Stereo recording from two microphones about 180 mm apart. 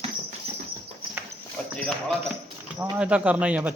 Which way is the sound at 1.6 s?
5° left (ahead or behind).